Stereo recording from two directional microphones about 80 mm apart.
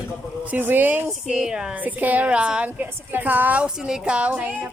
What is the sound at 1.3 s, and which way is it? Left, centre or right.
Speech, centre.